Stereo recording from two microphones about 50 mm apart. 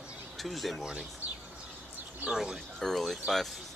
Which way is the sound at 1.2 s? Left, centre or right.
Right.